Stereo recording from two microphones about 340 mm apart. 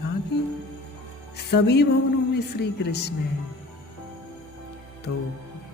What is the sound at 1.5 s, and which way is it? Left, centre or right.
Speech, left.